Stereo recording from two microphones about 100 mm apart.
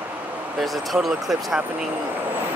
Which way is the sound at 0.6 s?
Centre (ahead or behind).